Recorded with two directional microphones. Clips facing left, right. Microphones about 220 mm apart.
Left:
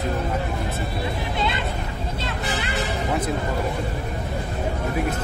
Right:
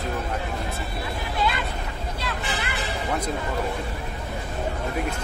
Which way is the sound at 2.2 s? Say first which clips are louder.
Left 2 dB; 25° left (ahead or behind).